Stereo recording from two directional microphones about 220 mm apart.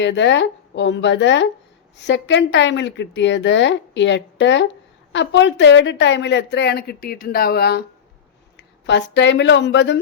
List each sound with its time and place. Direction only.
0.0 s speech: 55° left (ahead or behind)